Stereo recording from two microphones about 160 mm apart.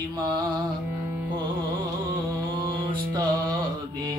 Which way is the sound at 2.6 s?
30° right (ahead or behind).